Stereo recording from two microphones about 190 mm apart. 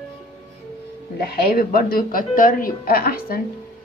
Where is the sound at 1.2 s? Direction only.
50° left (ahead or behind).